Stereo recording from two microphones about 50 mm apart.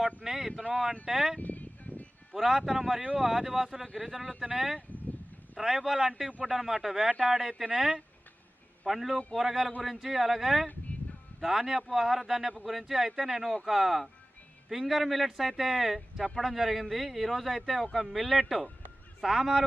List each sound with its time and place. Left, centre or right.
0.3 s speech: centre
1.4 s a sound: left
2.3 s speech: centre
3.8 s speech: centre
8.9 s speech: centre